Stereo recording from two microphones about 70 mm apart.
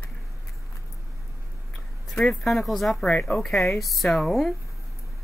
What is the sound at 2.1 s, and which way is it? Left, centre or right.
Speech, centre.